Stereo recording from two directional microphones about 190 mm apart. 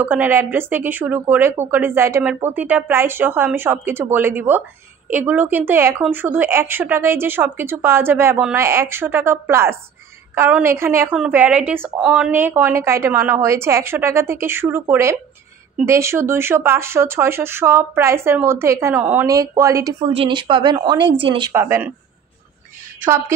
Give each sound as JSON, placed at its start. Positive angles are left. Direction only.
{"t": 0.0, "sound": "a woman's voice", "side_deg": -10}
{"t": 21.5, "sound": "a woman's voice", "side_deg": -15}
{"t": 23.0, "sound": "a woman's voice", "side_deg": -15}